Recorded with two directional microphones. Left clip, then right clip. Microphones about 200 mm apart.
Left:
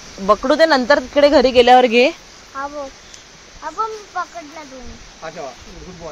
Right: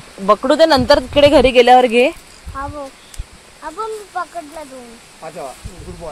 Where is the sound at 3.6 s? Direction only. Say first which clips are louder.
Left 1 dB; 45° right (ahead or behind).